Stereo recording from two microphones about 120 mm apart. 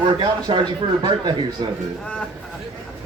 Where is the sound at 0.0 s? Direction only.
40° right (ahead or behind).